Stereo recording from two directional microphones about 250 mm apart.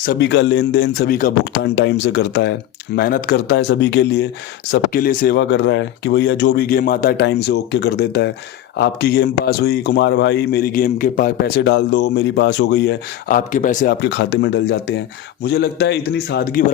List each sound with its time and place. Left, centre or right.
0.0 s speech: left
14.0 s speech: left